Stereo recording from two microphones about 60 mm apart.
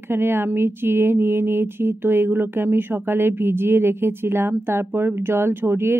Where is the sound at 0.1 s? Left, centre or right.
Right.